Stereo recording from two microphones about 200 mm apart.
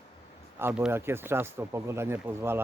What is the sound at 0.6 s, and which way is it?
Speech, 10° right (ahead or behind).